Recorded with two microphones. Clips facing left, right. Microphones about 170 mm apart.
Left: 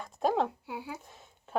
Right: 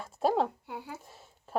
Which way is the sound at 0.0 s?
5° right (ahead or behind).